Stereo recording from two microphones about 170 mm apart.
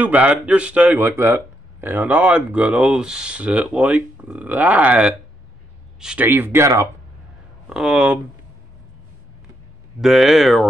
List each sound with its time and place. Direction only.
0.0 s speech: 10° right (ahead or behind)
7.7 s speech: 5° right (ahead or behind)
9.9 s speech: centre (ahead or behind)